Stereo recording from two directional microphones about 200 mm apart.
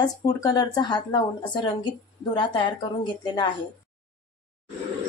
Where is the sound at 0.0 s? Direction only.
20° left (ahead or behind).